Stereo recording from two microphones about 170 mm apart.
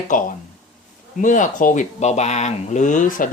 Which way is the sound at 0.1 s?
50° left (ahead or behind).